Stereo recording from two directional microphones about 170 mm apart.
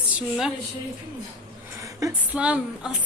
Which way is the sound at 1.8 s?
20° right (ahead or behind).